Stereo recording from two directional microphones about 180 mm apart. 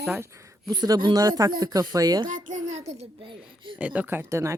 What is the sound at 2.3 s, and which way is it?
A child's voice, 45° right (ahead or behind).